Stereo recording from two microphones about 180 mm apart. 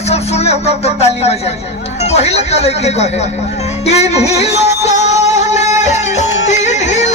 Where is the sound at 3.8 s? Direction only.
35° left (ahead or behind).